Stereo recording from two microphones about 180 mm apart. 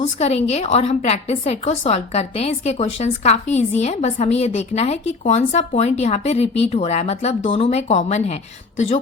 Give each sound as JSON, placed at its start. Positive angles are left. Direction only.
{"t": 0.0, "sound": "a woman's voice", "side_deg": 35}